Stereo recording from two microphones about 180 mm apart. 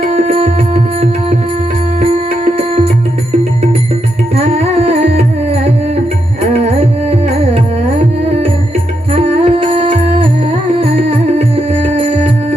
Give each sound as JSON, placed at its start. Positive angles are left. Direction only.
{"t": 0.0, "sound": "music", "side_deg": -50}
{"t": 0.3, "sound": "music", "side_deg": -35}
{"t": 2.6, "sound": "music", "side_deg": -35}
{"t": 4.4, "sound": "music", "side_deg": -35}
{"t": 6.7, "sound": "music", "side_deg": -35}